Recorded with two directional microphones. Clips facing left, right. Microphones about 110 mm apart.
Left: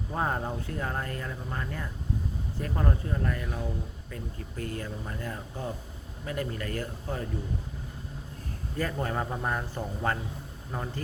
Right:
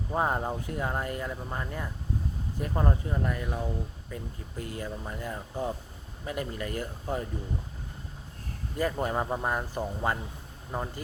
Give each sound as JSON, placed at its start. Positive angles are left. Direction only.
{"t": 0.1, "sound": "speech", "side_deg": -15}
{"t": 8.8, "sound": "speech", "side_deg": -15}